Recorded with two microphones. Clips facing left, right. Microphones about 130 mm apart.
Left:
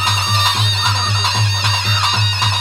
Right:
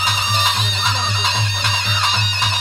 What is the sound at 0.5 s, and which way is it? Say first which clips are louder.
Music: left 2 dB; 65° left (ahead or behind).